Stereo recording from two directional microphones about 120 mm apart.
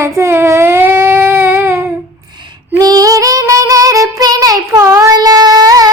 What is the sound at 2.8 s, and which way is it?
Child singing, 30° right (ahead or behind).